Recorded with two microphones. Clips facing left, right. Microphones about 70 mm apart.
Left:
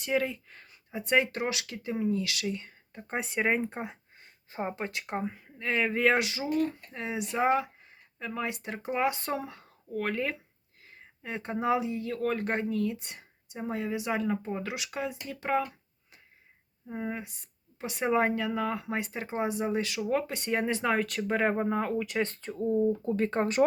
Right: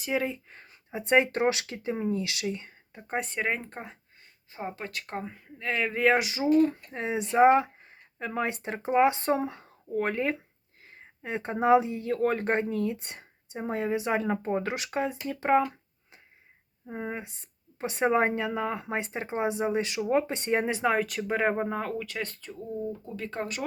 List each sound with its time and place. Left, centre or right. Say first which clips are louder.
0.0 s speech: even; centre
0.3 s speech: right 3 dB; right
2.9 s speech: right 1 dB; centre
4.5 s speech: left 2 dB; left; by 6.4 s centre
6.6 s speech: right 6 dB; right
16.9 s speech: even; centre
20.7 s speech: right 2 dB; centre
22.0 s speech: left 5 dB; left